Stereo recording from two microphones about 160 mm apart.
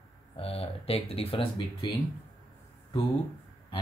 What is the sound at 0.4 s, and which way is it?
Speech, 35° left (ahead or behind).